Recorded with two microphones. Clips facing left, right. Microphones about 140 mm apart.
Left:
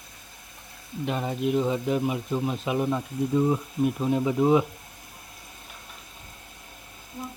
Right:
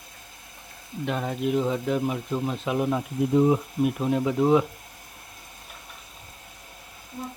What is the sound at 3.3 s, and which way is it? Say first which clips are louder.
Speech: right 3 dB; 20° right (ahead or behind).